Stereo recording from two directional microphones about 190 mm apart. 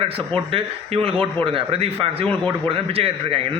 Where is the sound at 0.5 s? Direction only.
30° right (ahead or behind).